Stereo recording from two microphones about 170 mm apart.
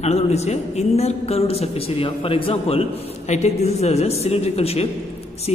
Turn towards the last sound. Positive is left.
turn(degrees=35)  # may be behind; listen again after turning